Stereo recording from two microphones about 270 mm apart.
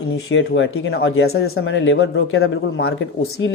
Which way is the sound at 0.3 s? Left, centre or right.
Left.